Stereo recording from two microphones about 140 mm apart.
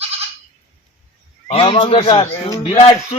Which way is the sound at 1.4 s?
40° left (ahead or behind).